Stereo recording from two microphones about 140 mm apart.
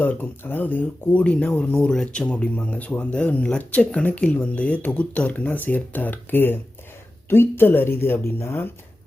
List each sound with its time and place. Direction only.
0.0 s speech: 15° left (ahead or behind)